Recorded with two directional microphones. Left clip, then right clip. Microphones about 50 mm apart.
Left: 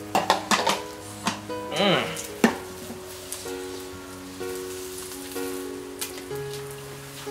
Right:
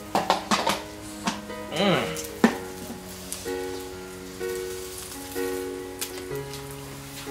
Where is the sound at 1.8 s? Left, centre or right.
Centre.